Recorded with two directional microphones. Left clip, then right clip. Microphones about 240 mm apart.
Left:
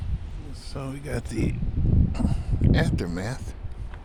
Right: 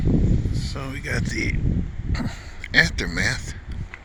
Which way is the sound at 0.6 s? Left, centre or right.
Centre.